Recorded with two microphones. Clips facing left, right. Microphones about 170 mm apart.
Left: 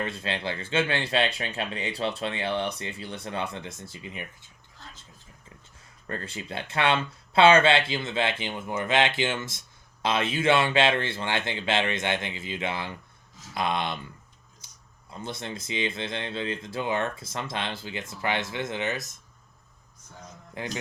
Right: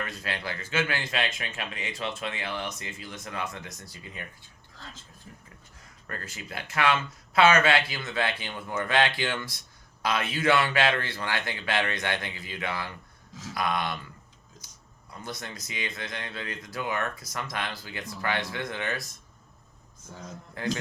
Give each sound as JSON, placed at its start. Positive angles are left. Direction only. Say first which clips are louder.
{"t": 0.0, "sound": "speech", "louder": "left 4 dB", "side_deg": 25}
{"t": 6.1, "sound": "speech", "louder": "left 5 dB", "side_deg": 30}
{"t": 14.6, "sound": "a sound", "louder": "right 1 dB", "side_deg": 25}
{"t": 15.1, "sound": "speech", "louder": "left 3 dB", "side_deg": 25}
{"t": 20.6, "sound": "speech", "louder": "right 4 dB", "side_deg": 20}